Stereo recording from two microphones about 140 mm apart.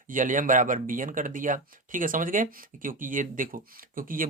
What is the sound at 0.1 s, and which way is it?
Speech, 70° right (ahead or behind).